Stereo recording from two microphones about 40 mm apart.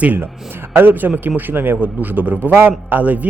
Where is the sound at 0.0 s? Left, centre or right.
Right.